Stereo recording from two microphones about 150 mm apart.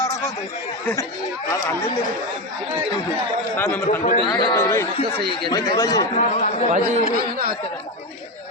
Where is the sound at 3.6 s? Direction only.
15° left (ahead or behind).